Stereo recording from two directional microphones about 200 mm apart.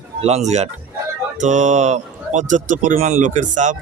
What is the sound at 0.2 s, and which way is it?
A man's voice, 35° right (ahead or behind).